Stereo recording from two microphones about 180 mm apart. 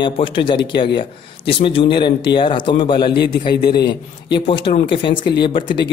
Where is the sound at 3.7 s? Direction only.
65° left (ahead or behind).